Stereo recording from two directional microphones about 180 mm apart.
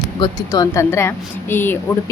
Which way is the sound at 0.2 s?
20° left (ahead or behind).